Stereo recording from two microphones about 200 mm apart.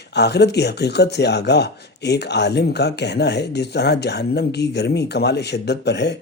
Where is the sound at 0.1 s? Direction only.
55° left (ahead or behind).